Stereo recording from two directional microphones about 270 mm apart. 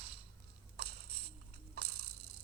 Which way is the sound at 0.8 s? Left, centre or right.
Right.